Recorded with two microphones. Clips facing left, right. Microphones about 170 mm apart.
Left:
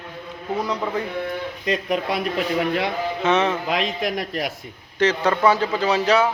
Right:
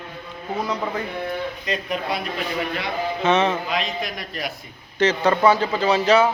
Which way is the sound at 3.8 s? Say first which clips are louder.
Left 4 dB; 90° left.